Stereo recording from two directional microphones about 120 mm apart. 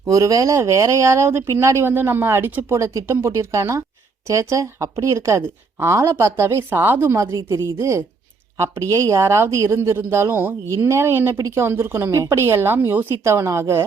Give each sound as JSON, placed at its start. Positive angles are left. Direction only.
{"t": 0.1, "sound": "speech", "side_deg": -30}